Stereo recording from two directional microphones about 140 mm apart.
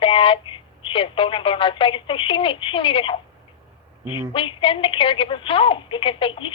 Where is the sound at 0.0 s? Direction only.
40° left (ahead or behind).